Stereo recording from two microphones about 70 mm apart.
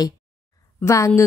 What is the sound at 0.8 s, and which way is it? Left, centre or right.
Speech, left.